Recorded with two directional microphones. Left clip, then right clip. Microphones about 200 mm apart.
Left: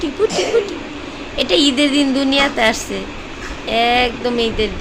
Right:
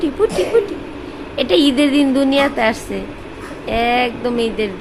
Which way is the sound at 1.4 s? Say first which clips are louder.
Even; 15° right (ahead or behind).